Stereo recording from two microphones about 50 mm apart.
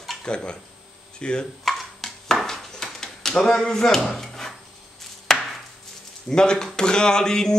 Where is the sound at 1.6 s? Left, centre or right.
Centre.